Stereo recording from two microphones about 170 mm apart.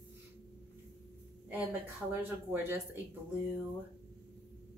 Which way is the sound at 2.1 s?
10° right (ahead or behind).